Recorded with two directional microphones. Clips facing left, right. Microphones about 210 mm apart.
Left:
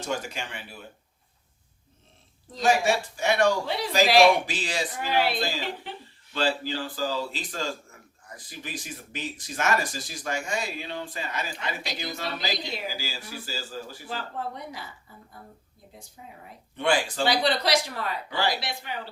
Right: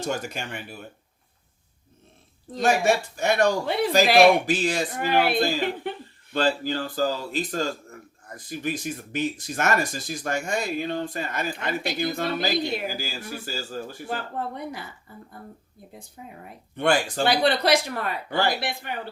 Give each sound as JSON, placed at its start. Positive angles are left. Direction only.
{"t": 2.5, "sound": "speech", "side_deg": -55}
{"t": 16.2, "sound": "speech", "side_deg": -55}